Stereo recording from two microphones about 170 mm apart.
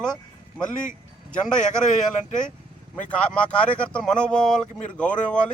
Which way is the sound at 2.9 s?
5° left (ahead or behind).